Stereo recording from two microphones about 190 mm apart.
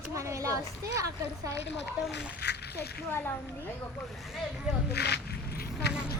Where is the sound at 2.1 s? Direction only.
60° left (ahead or behind).